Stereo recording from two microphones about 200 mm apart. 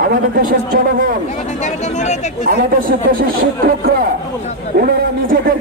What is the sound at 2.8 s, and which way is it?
A man's voice, 45° right (ahead or behind).